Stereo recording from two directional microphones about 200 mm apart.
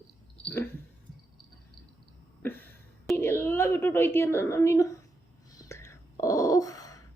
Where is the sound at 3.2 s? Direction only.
10° left (ahead or behind).